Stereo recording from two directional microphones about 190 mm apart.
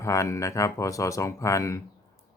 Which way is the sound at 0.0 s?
15° left (ahead or behind).